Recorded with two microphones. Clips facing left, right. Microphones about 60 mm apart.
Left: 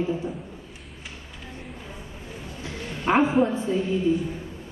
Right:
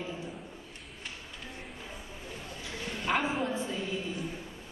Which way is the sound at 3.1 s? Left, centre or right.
Centre.